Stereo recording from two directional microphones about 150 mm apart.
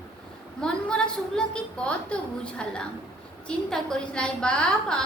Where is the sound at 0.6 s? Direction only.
5° left (ahead or behind).